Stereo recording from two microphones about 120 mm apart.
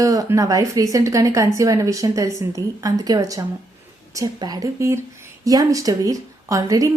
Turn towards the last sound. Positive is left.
turn(degrees=-30)  # may be behind; listen again after turning